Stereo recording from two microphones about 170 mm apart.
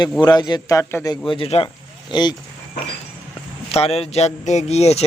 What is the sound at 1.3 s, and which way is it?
Speech, 35° left (ahead or behind).